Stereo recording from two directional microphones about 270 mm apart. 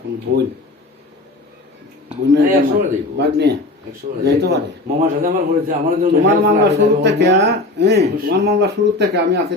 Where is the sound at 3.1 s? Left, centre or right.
Right.